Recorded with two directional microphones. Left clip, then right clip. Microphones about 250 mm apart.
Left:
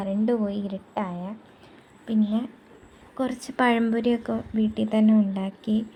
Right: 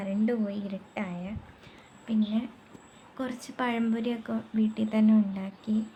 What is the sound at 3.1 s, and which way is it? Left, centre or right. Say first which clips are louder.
A woman's voice: left 7 dB; centre.